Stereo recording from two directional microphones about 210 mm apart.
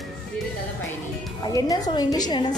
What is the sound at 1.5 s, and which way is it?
A woman's voice, 15° left (ahead or behind).